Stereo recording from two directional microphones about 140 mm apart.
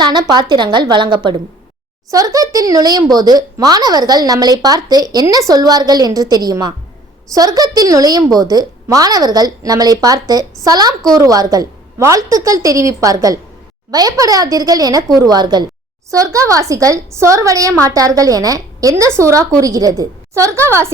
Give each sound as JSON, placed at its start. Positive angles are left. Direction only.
{"t": 0.0, "sound": "a woman's voice", "side_deg": -30}